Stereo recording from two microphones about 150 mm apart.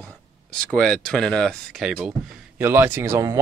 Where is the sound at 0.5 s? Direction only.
5° left (ahead or behind).